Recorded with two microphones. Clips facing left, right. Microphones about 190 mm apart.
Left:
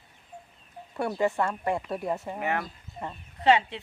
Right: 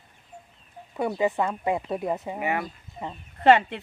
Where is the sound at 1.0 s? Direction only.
15° right (ahead or behind).